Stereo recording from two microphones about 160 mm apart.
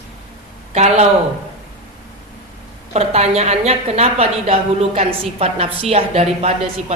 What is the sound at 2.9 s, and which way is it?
A woman's voice, 40° right (ahead or behind).